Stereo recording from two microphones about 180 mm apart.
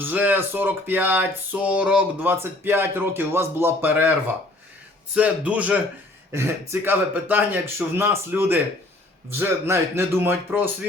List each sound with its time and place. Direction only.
0.0 s speech: 10° right (ahead or behind)
5.1 s speech: 10° right (ahead or behind)